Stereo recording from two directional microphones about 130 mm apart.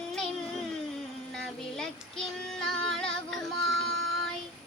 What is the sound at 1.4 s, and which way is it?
Female singing, 5° left (ahead or behind).